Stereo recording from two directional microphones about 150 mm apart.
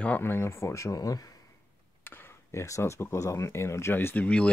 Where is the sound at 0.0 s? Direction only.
15° left (ahead or behind).